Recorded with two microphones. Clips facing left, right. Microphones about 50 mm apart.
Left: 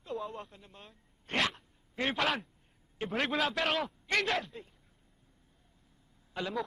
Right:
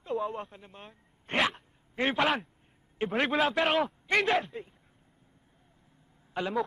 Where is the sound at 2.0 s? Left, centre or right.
Centre.